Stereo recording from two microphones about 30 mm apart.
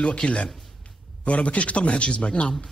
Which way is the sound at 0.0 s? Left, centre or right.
Left.